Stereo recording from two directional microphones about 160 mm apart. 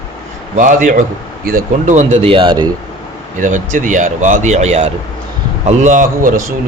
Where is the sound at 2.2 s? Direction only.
35° right (ahead or behind).